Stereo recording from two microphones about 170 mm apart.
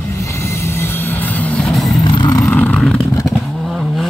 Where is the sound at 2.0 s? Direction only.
25° left (ahead or behind).